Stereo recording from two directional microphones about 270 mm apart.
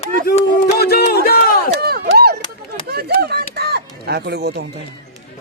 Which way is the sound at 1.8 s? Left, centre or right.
Right.